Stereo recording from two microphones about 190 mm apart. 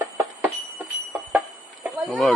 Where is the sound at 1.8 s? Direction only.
Centre (ahead or behind).